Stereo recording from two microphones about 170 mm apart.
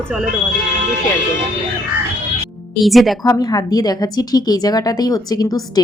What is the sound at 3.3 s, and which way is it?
A woman's voice, 20° left (ahead or behind).